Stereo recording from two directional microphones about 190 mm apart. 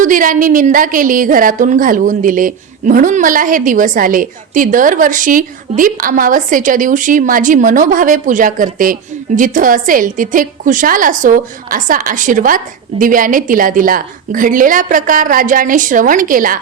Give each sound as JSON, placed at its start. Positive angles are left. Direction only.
{"t": 0.0, "sound": "a woman's voice", "side_deg": -45}